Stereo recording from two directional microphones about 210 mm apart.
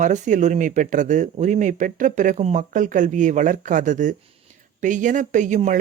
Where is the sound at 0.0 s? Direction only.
35° right (ahead or behind).